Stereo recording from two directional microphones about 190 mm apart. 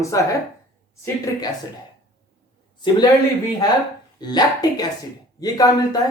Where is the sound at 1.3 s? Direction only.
15° left (ahead or behind).